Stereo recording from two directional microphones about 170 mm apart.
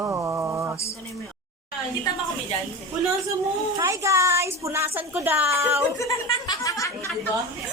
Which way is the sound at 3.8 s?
15° right (ahead or behind).